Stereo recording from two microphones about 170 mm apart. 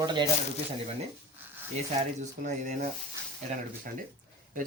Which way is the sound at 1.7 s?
45° right (ahead or behind).